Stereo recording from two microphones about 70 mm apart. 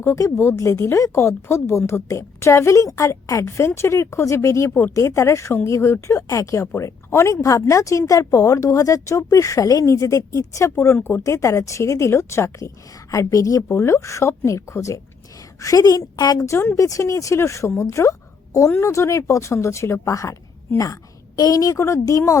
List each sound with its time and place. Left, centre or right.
0.0 s a woman's voice: left
11.2 s a woman's voice: left
13.7 s a woman's voice: left
16.4 s a woman's voice: left
20.7 s a woman's voice: left